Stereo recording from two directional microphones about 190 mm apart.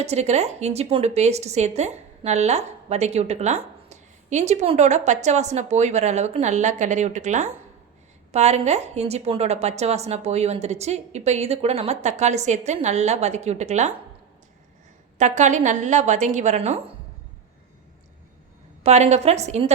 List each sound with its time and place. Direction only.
0.0 s a woman's voice: 35° right (ahead or behind)
15.2 s a woman's voice: 40° right (ahead or behind)
18.8 s a woman's voice: 35° right (ahead or behind)